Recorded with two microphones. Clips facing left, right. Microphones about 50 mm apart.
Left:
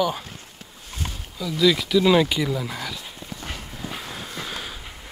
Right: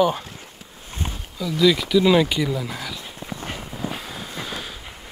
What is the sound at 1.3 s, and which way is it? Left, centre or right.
Speech, centre.